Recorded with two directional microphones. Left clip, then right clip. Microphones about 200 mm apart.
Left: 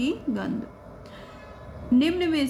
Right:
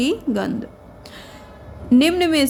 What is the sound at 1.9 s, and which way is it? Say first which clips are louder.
Speech: right 7 dB; 55° right (ahead or behind).